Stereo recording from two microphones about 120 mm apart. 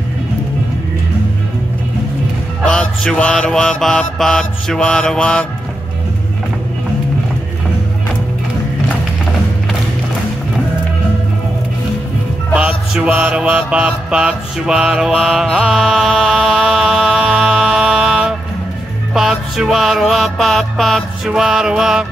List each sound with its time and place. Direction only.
2.6 s mantra: 5° left (ahead or behind)
12.5 s mantra: 10° right (ahead or behind)